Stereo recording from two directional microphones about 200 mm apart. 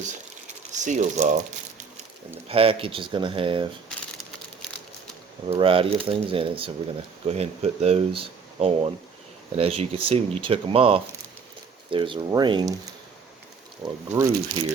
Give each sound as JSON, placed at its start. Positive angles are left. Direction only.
{"t": 0.8, "sound": "speech", "side_deg": -35}
{"t": 2.5, "sound": "speech", "side_deg": -30}
{"t": 5.5, "sound": "speech", "side_deg": -25}
{"t": 14.1, "sound": "speech", "side_deg": -10}